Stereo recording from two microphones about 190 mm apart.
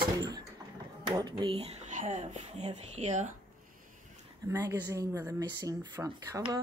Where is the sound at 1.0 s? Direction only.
25° right (ahead or behind).